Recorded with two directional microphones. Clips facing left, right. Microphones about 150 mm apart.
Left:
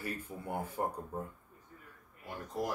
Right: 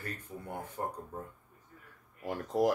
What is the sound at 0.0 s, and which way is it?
Speech, 10° left (ahead or behind).